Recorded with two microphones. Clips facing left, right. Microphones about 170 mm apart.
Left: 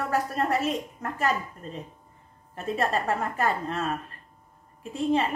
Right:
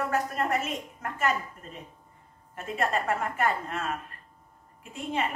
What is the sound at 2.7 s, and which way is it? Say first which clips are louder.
A woman's voice: left 2 dB; 35° left (ahead or behind).